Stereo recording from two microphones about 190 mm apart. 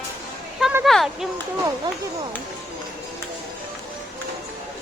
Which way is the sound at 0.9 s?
Centre (ahead or behind).